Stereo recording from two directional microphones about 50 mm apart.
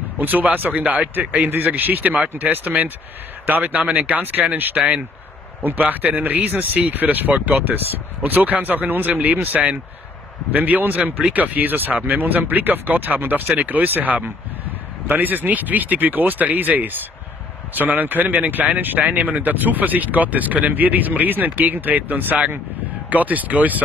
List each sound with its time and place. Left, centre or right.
0.2 s speech: right